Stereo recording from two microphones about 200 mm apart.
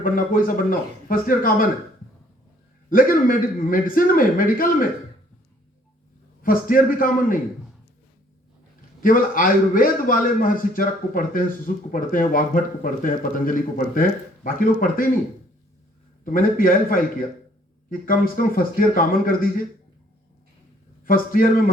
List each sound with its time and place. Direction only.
0.0 s a man's voice: 45° left (ahead or behind)
2.9 s a man's voice: 45° left (ahead or behind)
6.4 s a man's voice: 45° left (ahead or behind)
9.0 s a man's voice: 45° left (ahead or behind)
16.2 s a man's voice: 45° left (ahead or behind)
18.0 s a man's voice: 45° left (ahead or behind)
21.0 s a man's voice: 45° left (ahead or behind)